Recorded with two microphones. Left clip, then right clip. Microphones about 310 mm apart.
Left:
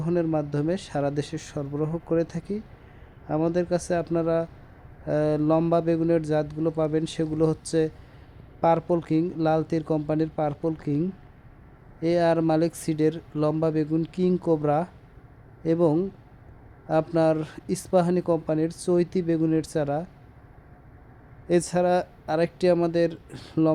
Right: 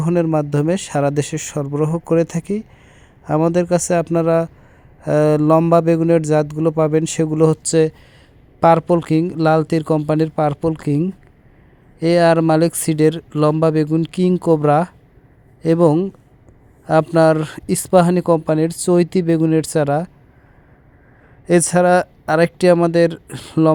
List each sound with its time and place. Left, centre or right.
0.0 s speech: centre
21.4 s speech: centre